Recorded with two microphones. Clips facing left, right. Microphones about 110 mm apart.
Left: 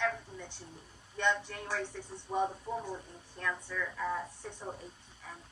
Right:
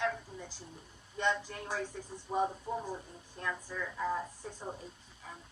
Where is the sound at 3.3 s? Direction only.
20° right (ahead or behind).